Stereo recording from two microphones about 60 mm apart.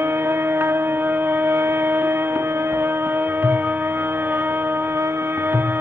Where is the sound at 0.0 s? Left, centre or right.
Right.